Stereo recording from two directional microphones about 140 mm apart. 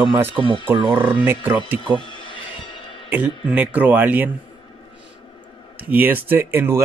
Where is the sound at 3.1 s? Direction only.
10° right (ahead or behind).